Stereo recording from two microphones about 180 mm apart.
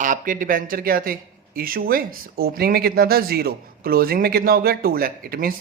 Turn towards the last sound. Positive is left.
turn(degrees=-55)  # may be behind; listen again after turning